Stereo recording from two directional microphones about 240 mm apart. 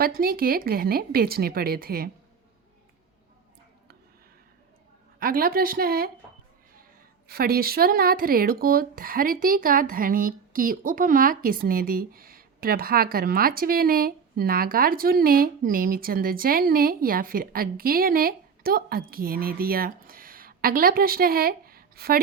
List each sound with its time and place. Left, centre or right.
0.2 s speech: right
5.2 s speech: right
7.3 s speech: right